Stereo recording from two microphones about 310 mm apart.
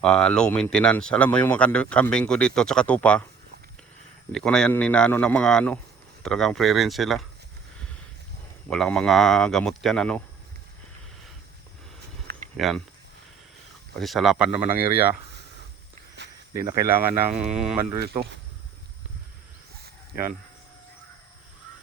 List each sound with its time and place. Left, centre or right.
0.0 s speech: centre
4.3 s speech: centre
8.7 s speech: centre
12.5 s speech: centre
13.9 s speech: centre
16.6 s speech: centre
18.0 s speech: right